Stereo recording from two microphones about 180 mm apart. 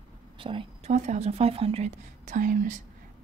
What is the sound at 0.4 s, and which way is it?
Speech, 30° right (ahead or behind).